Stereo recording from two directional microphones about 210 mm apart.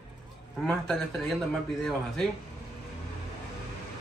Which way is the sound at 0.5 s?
Centre (ahead or behind).